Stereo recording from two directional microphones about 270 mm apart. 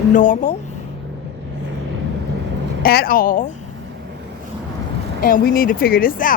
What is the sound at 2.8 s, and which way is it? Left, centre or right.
Speech, left.